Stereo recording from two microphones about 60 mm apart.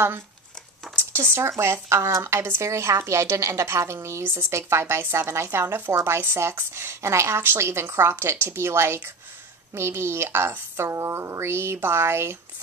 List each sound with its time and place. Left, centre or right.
0.9 s a sound: right
1.6 s speech: right
4.2 s a woman's voice: right
4.5 s speech: right